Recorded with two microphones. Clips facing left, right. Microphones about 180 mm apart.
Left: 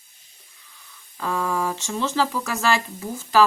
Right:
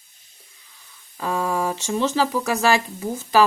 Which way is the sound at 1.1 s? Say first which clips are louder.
Right 2 dB; 20° right (ahead or behind).